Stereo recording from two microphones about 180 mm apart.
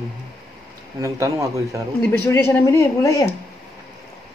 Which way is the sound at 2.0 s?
10° left (ahead or behind).